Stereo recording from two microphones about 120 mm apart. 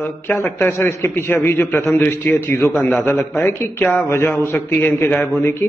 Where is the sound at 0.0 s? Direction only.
20° left (ahead or behind).